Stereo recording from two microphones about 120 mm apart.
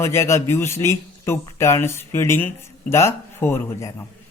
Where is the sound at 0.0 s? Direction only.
25° left (ahead or behind).